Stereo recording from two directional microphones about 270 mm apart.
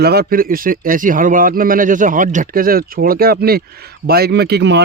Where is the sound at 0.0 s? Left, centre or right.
Right.